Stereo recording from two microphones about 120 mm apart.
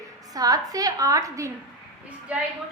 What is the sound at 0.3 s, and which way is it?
A woman's voice, 30° right (ahead or behind).